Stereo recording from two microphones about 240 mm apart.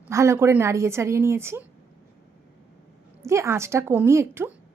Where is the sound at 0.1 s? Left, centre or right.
Centre.